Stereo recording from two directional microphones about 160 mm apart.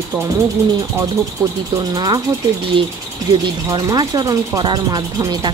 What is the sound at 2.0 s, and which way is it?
Speech, 25° right (ahead or behind).